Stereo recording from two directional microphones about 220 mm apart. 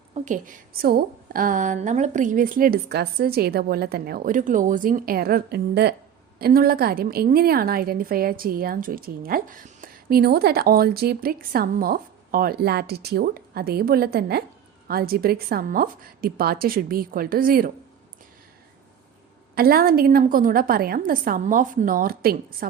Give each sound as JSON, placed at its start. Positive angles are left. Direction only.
{"t": 0.1, "sound": "a woman's voice", "side_deg": -35}
{"t": 19.5, "sound": "a woman's voice", "side_deg": -45}